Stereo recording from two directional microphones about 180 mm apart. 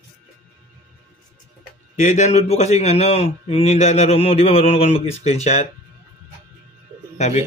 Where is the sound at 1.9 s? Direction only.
40° left (ahead or behind).